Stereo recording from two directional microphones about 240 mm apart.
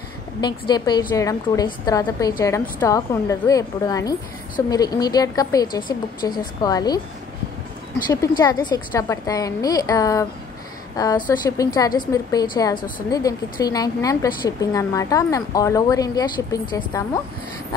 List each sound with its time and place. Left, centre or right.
0.4 s a woman's voice: centre
8.1 s a woman's voice: centre
11.2 s a woman's voice: centre